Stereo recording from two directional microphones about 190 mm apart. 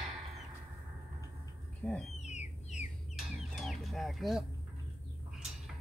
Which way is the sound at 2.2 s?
35° left (ahead or behind).